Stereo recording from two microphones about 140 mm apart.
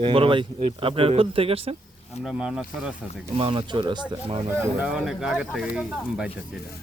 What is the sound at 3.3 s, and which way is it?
Speech, 40° right (ahead or behind).